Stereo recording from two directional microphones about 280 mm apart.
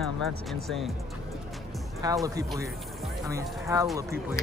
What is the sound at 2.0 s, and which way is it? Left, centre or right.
Speech, centre.